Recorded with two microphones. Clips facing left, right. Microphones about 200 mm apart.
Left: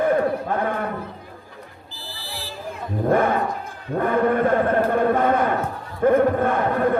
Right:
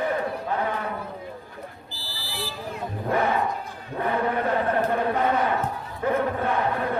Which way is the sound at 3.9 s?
50° left (ahead or behind).